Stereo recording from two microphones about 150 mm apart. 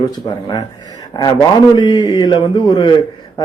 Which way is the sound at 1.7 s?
30° left (ahead or behind).